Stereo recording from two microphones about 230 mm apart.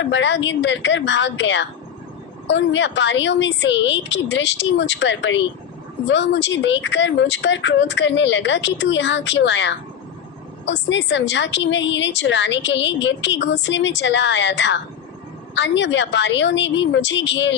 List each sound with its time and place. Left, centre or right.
0.0 s a woman's voice: left